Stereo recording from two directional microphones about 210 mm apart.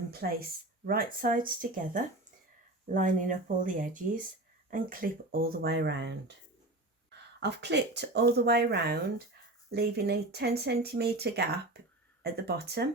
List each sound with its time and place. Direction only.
0.1 s speech: 45° right (ahead or behind)